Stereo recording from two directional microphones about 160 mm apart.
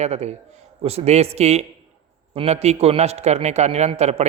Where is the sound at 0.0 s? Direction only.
45° right (ahead or behind).